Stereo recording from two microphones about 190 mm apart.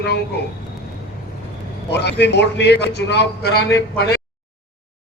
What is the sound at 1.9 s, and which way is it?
A man's voice, 65° left (ahead or behind).